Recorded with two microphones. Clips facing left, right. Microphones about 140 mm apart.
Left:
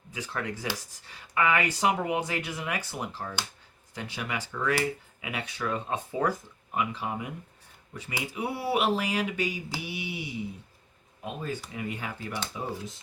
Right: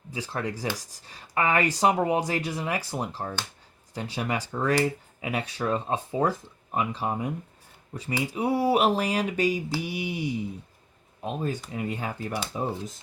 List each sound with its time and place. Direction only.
0.1 s speech: 30° right (ahead or behind)